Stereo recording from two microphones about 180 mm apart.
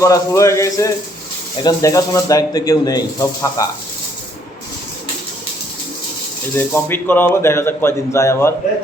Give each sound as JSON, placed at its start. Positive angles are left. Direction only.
{"t": 0.0, "sound": "speech", "side_deg": 15}
{"t": 6.6, "sound": "speech", "side_deg": 10}